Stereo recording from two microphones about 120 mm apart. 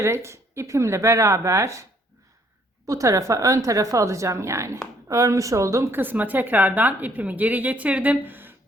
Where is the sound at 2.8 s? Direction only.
25° right (ahead or behind).